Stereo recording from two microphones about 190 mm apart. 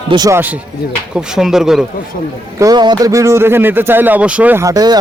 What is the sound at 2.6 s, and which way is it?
A man's voice, 20° right (ahead or behind).